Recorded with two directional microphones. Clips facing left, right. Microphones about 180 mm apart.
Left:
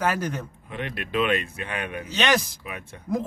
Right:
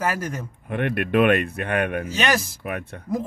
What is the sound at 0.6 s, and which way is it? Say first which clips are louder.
Speech: right 11 dB; 55° right (ahead or behind).